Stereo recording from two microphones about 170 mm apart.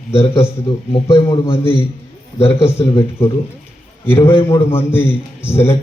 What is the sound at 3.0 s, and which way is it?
A man's voice, 15° left (ahead or behind).